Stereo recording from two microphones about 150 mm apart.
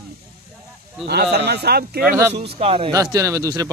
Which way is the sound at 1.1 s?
90° right.